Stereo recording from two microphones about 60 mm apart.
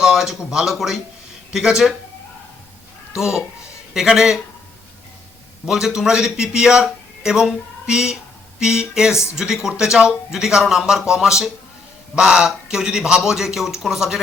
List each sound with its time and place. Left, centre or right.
0.0 s speech: centre
3.2 s speech: centre
5.6 s speech: centre